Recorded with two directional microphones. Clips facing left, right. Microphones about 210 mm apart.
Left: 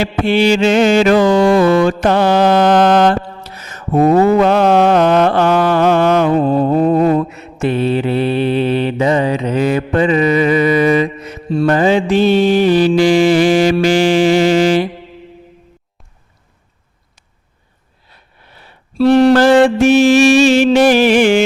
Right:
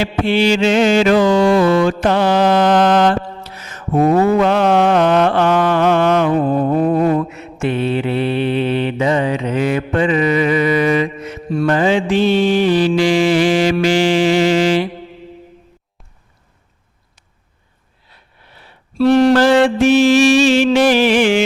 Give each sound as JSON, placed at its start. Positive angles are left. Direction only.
{"t": 0.0, "sound": "mantra", "side_deg": 50}
{"t": 13.8, "sound": "music", "side_deg": 45}
{"t": 18.9, "sound": "music", "side_deg": 30}
{"t": 19.3, "sound": "music", "side_deg": 50}